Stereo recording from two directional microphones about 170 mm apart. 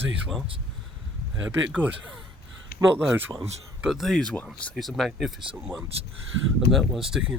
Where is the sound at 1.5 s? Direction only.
10° right (ahead or behind).